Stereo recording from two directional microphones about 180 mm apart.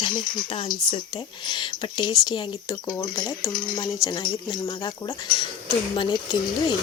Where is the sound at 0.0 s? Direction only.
25° left (ahead or behind).